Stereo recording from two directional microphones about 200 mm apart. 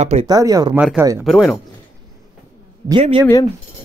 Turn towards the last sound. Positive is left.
turn(degrees=-25)  # may be behind; listen again after turning